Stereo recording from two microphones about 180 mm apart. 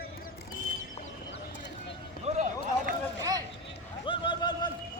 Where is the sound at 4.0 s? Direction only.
25° left (ahead or behind).